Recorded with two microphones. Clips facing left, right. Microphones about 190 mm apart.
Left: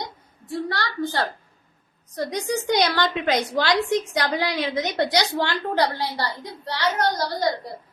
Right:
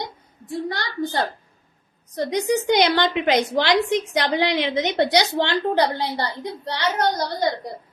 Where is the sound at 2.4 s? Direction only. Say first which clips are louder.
Right 4 dB; 20° right (ahead or behind).